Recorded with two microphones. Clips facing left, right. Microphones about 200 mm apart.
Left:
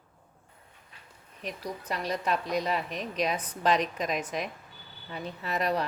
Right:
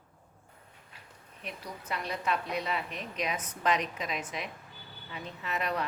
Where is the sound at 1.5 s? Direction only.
40° left (ahead or behind).